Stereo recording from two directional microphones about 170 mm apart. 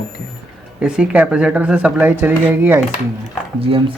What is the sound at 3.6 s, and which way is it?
Speech, 30° right (ahead or behind).